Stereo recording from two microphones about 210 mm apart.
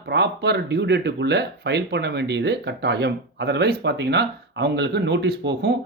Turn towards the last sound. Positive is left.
turn(degrees=-50)  # may be behind; listen again after turning